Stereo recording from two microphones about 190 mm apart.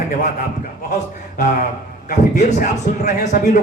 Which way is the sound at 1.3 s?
45° left (ahead or behind).